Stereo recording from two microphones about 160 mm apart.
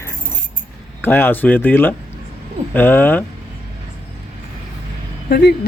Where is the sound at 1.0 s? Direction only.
10° left (ahead or behind).